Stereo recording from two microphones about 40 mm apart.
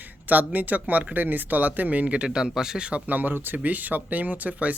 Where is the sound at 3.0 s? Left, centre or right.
Right.